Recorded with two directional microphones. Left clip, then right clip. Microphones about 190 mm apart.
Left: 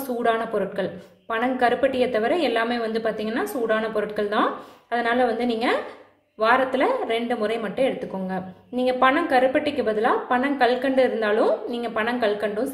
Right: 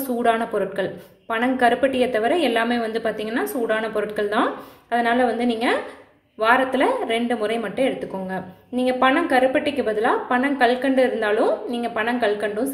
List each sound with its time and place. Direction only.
0.2 s a woman's voice: 5° right (ahead or behind)